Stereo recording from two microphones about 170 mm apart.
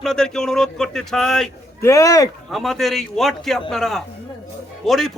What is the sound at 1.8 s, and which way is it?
Speech, 20° left (ahead or behind).